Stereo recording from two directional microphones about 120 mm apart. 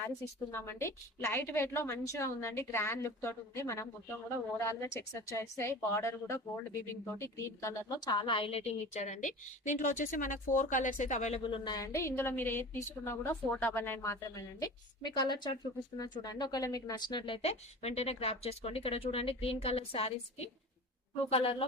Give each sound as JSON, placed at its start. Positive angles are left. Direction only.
{"t": 0.5, "sound": "a woman's voice", "side_deg": 20}
{"t": 8.0, "sound": "a woman's voice", "side_deg": 40}
{"t": 11.4, "sound": "a woman's voice", "side_deg": 45}
{"t": 11.7, "sound": "a woman's voice", "side_deg": 25}